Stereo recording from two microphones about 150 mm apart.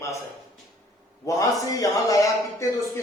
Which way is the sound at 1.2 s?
20° left (ahead or behind).